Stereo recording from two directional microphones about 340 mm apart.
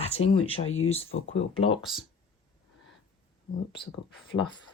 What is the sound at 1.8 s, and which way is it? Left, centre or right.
Speech, centre.